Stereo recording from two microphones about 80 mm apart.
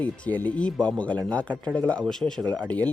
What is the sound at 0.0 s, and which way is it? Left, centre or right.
Speech, left.